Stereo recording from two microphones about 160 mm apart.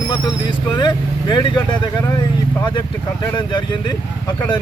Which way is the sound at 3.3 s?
30° left (ahead or behind).